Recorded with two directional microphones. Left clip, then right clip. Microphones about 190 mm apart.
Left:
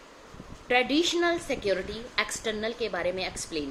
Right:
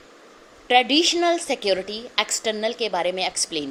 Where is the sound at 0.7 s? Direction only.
30° right (ahead or behind).